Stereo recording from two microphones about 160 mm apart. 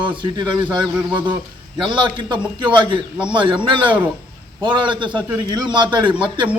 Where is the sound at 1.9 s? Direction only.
30° right (ahead or behind).